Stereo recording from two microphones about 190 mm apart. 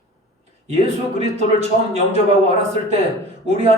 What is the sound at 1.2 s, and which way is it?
A man's voice, 35° right (ahead or behind).